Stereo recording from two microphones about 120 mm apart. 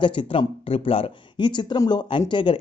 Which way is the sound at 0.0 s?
45° left (ahead or behind).